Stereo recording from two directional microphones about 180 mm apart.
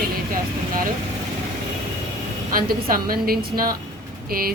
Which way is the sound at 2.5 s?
55° right (ahead or behind).